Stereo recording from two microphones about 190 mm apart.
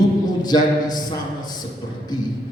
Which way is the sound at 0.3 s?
20° left (ahead or behind).